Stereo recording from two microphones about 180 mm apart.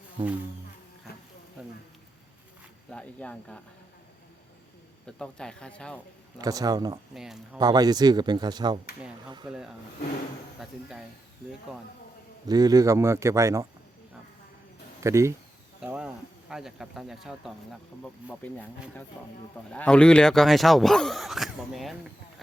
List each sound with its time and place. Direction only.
2.9 s speech: 5° left (ahead or behind)
5.0 s speech: 5° left (ahead or behind)
6.4 s speech: 20° right (ahead or behind)
7.1 s speech: centre (ahead or behind)
7.6 s speech: 20° right (ahead or behind)
9.5 s speech: 5° right (ahead or behind)
12.5 s speech: 20° right (ahead or behind)
15.0 s speech: 15° right (ahead or behind)
15.8 s speech: 5° right (ahead or behind)